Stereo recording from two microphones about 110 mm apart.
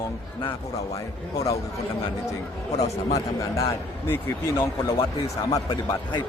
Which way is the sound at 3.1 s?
30° left (ahead or behind).